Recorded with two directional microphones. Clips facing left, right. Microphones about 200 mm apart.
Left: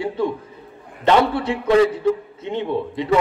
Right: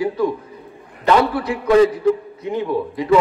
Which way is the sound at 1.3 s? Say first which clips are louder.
Right 2 dB; 25° left (ahead or behind).